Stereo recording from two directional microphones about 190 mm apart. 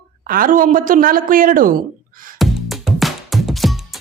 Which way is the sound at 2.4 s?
Centre (ahead or behind).